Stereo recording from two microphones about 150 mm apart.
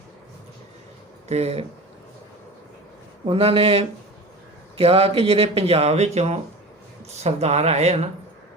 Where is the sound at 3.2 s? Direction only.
40° right (ahead or behind).